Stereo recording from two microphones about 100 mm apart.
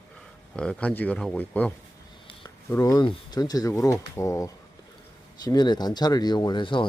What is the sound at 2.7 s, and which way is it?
Speech, 35° left (ahead or behind).